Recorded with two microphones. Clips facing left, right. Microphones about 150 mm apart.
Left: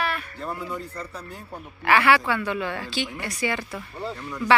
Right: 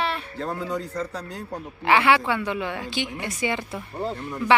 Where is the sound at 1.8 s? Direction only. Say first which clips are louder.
Even; 20° right (ahead or behind).